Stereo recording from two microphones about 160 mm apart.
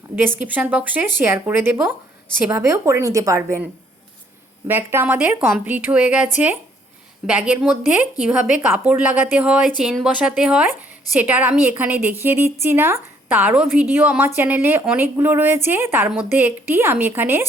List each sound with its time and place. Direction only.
0.2 s a woman's voice: 10° right (ahead or behind)
4.7 s a woman's voice: 15° right (ahead or behind)